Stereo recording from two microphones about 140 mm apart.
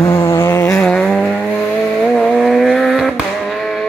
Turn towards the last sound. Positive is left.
turn(degrees=0)  # may be behind; listen again after turning